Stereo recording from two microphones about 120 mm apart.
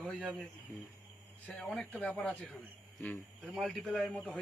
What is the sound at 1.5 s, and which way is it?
A man's voice, 5° left (ahead or behind).